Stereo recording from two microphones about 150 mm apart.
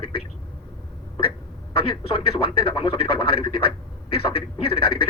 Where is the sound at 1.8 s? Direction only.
35° left (ahead or behind).